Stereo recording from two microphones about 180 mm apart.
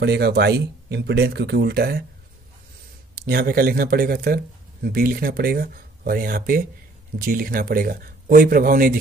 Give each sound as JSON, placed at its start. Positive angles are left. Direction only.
{"t": 0.0, "sound": "speech", "side_deg": -65}
{"t": 3.2, "sound": "speech", "side_deg": -55}